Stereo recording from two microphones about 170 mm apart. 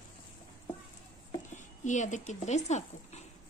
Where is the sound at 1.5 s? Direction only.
45° left (ahead or behind).